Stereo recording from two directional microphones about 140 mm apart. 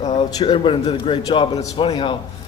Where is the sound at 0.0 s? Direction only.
45° left (ahead or behind).